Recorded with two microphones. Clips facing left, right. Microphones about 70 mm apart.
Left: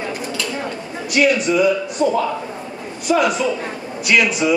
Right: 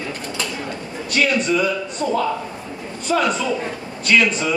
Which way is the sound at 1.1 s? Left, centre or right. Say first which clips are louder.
Left 3 dB; centre.